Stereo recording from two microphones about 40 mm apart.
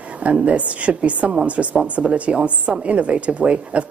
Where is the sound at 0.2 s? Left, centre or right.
Right.